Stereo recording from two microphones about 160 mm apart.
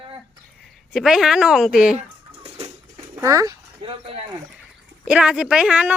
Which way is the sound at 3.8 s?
35° right (ahead or behind).